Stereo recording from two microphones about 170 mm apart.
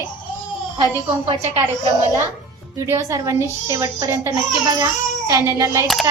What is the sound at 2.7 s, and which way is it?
A child's voice, 15° right (ahead or behind).